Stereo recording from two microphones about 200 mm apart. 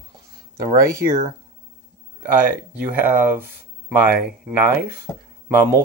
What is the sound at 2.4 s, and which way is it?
Speech, 10° right (ahead or behind).